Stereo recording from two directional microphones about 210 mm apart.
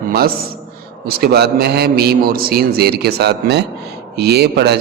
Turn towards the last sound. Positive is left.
turn(degrees=-50)  # may be behind; listen again after turning